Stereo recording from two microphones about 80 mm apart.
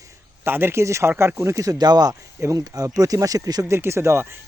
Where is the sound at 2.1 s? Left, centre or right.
Right.